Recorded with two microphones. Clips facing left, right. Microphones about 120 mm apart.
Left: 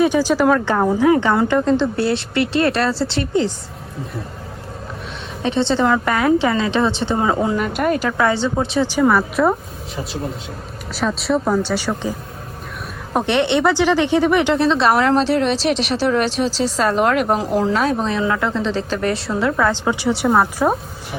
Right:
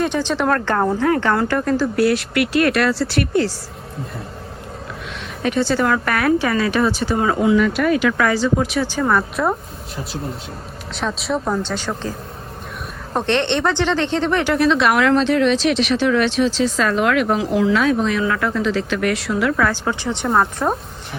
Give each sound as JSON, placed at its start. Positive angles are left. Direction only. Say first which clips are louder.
{"t": 0.0, "sound": "speech", "louder": "left 4 dB", "side_deg": 5}
{"t": 5.4, "sound": "speech", "louder": "left 1 dB", "side_deg": 25}
{"t": 7.5, "sound": "speech", "louder": "right 3 dB", "side_deg": 45}
{"t": 8.2, "sound": "speech", "louder": "even", "side_deg": 25}
{"t": 8.9, "sound": "speech", "louder": "left 3 dB", "side_deg": 5}
{"t": 13.1, "sound": "speech", "louder": "left 2 dB", "side_deg": 10}